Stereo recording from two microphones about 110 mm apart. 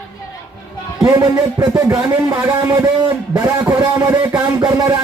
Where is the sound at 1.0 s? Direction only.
35° right (ahead or behind).